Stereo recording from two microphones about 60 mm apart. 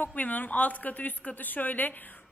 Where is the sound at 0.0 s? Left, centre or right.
Left.